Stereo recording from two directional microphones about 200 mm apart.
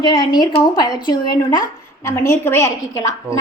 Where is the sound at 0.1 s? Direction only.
20° left (ahead or behind).